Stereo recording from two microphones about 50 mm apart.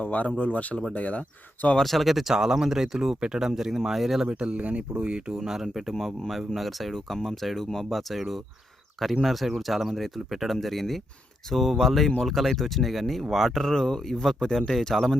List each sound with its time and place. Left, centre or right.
0.0 s speech: left
1.8 s speech: centre
4.3 s speech: right
5.4 s speech: centre